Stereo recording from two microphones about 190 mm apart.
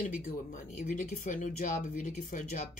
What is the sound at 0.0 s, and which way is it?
Speech, 45° left (ahead or behind).